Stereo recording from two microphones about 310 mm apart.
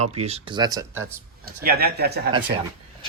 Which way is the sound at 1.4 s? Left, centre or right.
Right.